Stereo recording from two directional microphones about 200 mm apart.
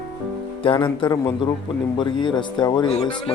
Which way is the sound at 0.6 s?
25° left (ahead or behind).